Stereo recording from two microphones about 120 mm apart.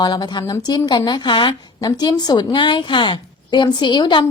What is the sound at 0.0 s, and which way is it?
Speech, 35° left (ahead or behind).